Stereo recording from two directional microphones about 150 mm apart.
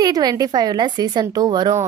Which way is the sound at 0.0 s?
25° right (ahead or behind).